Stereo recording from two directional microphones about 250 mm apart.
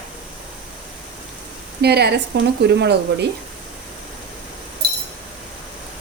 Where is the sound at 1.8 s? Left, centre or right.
Right.